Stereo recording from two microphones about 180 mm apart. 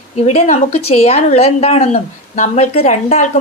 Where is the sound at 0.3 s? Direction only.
40° left (ahead or behind).